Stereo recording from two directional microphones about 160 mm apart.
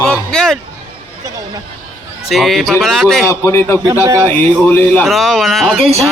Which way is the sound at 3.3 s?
15° left (ahead or behind).